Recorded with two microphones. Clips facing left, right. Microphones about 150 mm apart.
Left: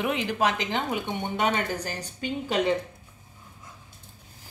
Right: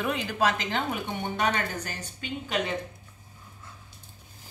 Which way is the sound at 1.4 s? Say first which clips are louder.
Left 2 dB; 30° left (ahead or behind).